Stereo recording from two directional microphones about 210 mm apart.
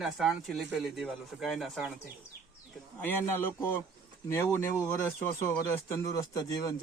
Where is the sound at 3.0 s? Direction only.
10° left (ahead or behind).